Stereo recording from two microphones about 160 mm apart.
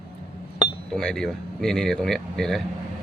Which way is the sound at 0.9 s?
5° left (ahead or behind).